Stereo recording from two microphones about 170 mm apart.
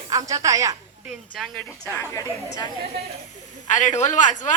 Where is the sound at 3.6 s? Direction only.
45° left (ahead or behind).